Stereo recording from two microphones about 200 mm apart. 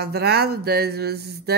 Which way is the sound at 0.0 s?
55° right (ahead or behind).